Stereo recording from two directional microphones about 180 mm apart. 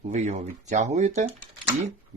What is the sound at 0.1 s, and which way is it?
Speech, 40° right (ahead or behind).